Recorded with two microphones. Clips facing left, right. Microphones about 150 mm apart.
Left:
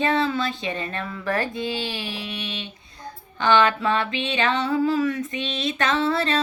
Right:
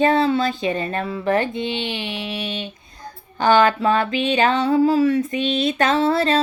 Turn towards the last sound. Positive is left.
turn(degrees=-35)  # may be behind; listen again after turning